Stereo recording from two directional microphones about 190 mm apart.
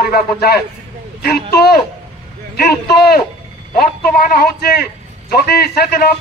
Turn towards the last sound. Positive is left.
turn(degrees=55)  # may be behind; listen again after turning